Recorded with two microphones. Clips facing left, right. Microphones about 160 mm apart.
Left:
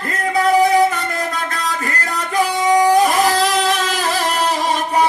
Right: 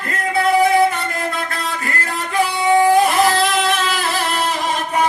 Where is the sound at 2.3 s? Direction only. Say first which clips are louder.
Even; 40° left (ahead or behind).